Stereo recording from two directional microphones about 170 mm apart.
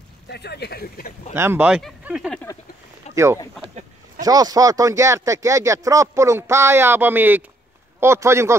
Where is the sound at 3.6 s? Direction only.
40° right (ahead or behind).